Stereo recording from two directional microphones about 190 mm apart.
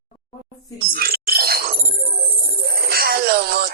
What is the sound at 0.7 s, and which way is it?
Music, 50° right (ahead or behind).